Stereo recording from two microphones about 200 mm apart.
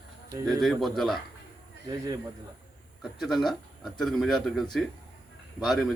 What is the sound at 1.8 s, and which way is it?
Speech, 20° right (ahead or behind).